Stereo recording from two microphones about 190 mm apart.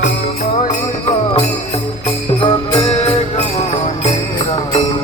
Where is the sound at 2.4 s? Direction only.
30° left (ahead or behind).